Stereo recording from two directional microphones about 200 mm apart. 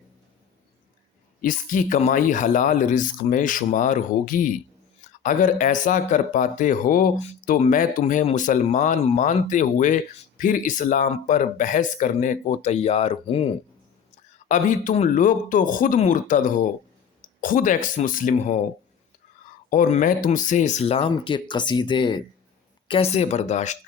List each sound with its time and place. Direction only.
1.4 s speech: 40° left (ahead or behind)
19.7 s speech: 40° left (ahead or behind)